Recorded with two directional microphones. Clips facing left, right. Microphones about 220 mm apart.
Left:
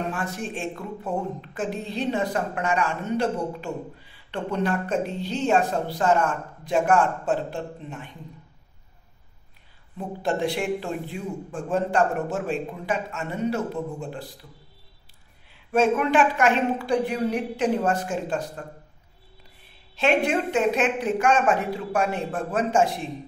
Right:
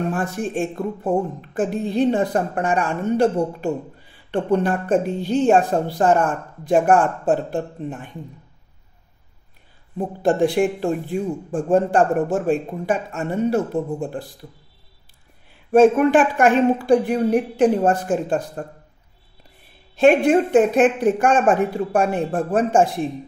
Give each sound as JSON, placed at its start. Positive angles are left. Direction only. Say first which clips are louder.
{"t": 0.1, "sound": "speech", "louder": "right 7 dB", "side_deg": -50}
{"t": 9.9, "sound": "speech", "louder": "right 8 dB", "side_deg": -50}
{"t": 15.7, "sound": "speech", "louder": "right 8 dB", "side_deg": -50}
{"t": 20.0, "sound": "speech", "louder": "right 8 dB", "side_deg": -50}